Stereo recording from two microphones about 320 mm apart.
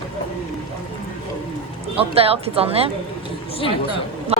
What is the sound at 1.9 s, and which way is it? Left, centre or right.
Speech, centre.